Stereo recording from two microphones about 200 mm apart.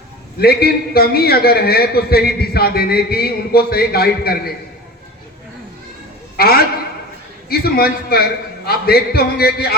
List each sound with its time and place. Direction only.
0.3 s a man's voice: 50° left (ahead or behind)
6.3 s a sound: 50° left (ahead or behind)
7.5 s a man's voice: 50° left (ahead or behind)